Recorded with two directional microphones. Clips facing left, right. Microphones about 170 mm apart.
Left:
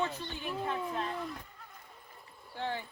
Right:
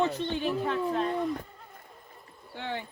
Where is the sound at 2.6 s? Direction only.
70° right (ahead or behind).